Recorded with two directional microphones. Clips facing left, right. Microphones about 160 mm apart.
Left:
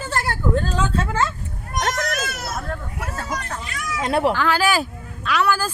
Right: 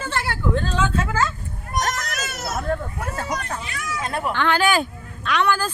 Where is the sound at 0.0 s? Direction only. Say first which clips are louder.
Left 1 dB; 40° left (ahead or behind).